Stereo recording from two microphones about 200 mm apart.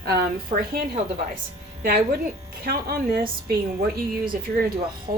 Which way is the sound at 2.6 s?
50° right (ahead or behind).